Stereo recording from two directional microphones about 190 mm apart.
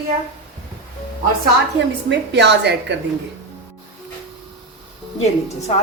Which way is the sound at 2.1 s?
65° right (ahead or behind).